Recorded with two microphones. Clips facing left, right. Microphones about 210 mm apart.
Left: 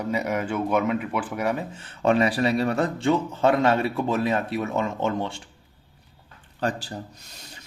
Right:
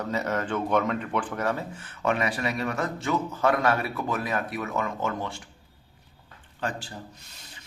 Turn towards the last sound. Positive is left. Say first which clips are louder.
# left 5 dB
turn(degrees=40)  # may be behind; listen again after turning